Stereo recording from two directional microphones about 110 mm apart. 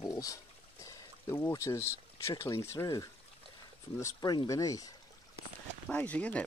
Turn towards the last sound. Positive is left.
turn(degrees=15)  # may be behind; listen again after turning